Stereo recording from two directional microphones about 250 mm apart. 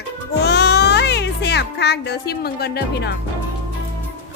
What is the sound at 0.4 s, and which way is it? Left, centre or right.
Music, left.